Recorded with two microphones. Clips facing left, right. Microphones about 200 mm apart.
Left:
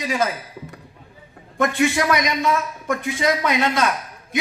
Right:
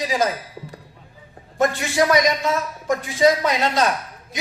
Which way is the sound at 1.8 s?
35° right (ahead or behind).